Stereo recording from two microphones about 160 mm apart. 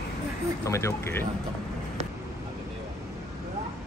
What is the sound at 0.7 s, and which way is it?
Speech, 15° left (ahead or behind).